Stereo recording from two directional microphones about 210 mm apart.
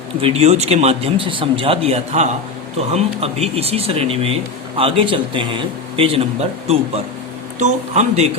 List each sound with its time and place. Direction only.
0.2 s a man's voice: 25° right (ahead or behind)